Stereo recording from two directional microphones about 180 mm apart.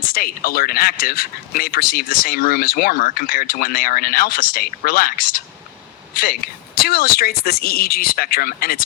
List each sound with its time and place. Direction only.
0.0 s speech: 55° left (ahead or behind)